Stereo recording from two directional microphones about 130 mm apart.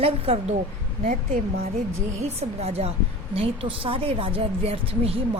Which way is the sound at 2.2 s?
55° right (ahead or behind).